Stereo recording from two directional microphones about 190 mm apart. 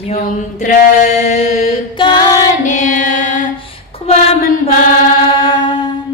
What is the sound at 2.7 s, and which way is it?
Music, 40° left (ahead or behind).